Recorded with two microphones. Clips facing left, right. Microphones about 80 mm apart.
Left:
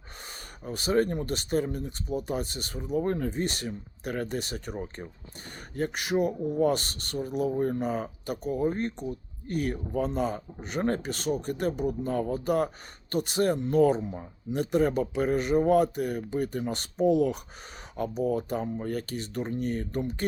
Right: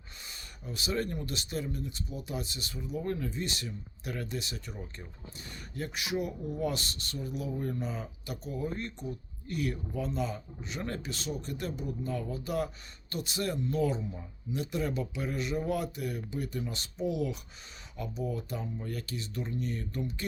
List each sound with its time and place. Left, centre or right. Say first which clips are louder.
0.6 s speech: left 8 dB; left